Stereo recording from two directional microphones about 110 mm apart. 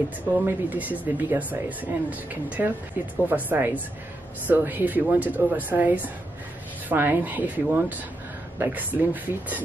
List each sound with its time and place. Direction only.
0.4 s speech: 15° right (ahead or behind)